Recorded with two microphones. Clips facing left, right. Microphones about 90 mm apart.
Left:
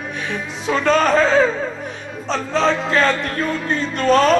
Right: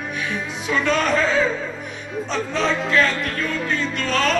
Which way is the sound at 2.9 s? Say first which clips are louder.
Left 2 dB; 45° left (ahead or behind).